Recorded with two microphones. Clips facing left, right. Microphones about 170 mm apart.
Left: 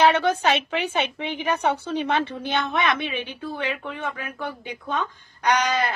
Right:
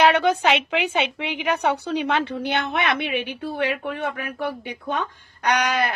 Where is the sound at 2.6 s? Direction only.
55° right (ahead or behind).